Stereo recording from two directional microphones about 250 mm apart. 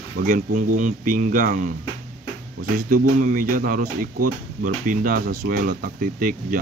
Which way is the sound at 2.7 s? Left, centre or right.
Right.